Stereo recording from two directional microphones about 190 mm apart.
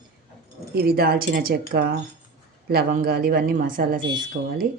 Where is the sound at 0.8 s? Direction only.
50° right (ahead or behind).